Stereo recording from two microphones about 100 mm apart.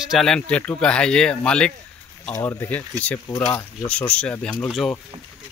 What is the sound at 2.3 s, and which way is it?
Speech, 30° left (ahead or behind).